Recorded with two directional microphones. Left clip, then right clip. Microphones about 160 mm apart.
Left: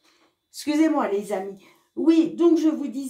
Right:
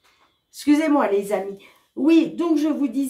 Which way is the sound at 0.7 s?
35° left (ahead or behind).